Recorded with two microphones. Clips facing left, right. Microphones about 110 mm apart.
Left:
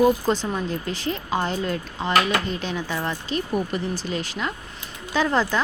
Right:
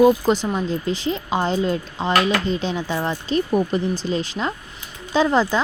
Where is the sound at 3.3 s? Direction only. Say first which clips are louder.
Right 7 dB; 35° right (ahead or behind).